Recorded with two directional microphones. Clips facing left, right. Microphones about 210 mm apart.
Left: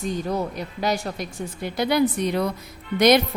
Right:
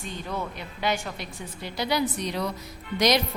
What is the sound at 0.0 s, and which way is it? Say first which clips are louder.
A woman's voice: left 7 dB; 40° left (ahead or behind).